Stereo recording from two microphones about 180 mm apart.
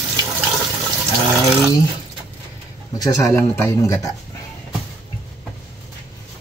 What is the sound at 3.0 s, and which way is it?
Speech, 15° left (ahead or behind).